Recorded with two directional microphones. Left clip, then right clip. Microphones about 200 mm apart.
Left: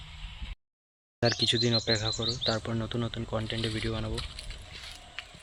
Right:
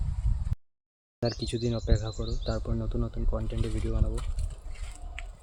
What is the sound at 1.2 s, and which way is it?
Speech, centre (ahead or behind).